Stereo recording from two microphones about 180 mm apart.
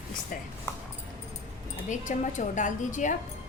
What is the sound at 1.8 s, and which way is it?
Speech, 45° left (ahead or behind).